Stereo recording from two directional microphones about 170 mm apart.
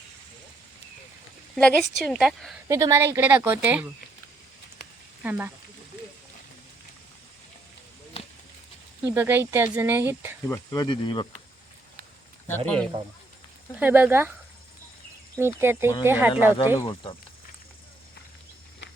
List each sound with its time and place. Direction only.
1.5 s a woman's voice: centre (ahead or behind)
2.6 s speech: 20° right (ahead or behind)
5.2 s speech: 10° right (ahead or behind)
9.0 s speech: 15° right (ahead or behind)
10.4 s speech: 20° left (ahead or behind)
12.5 s speech: 10° left (ahead or behind)
13.7 s speech: 10° right (ahead or behind)
15.4 s speech: 15° right (ahead or behind)
16.7 s speech: 30° left (ahead or behind)